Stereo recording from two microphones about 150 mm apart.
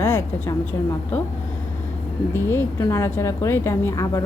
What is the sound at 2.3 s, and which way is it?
Speech, 15° left (ahead or behind).